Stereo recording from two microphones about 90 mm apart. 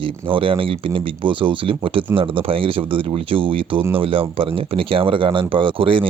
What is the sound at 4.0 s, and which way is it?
Speech, 80° right.